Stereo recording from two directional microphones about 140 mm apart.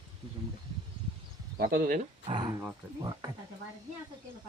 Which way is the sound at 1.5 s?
85° right.